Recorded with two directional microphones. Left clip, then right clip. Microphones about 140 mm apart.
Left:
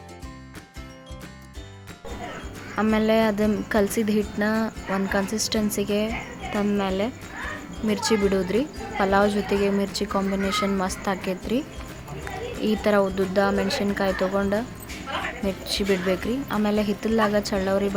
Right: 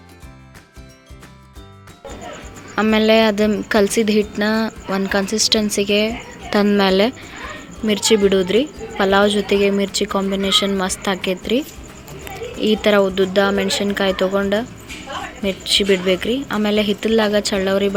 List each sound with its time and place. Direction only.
2.7 s speech: 25° right (ahead or behind)
6.5 s speech: 45° right (ahead or behind)
7.9 s speech: 25° right (ahead or behind)
12.6 s speech: 20° right (ahead or behind)